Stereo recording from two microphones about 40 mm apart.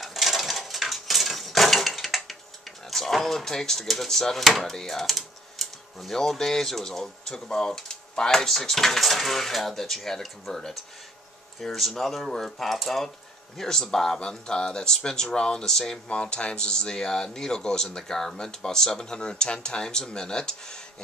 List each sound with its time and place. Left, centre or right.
0.0 s dishes: centre
2.9 s speech: centre
4.6 s typing: centre
6.1 s speech: centre
11.6 s speech: centre
13.7 s speech: centre
16.1 s speech: left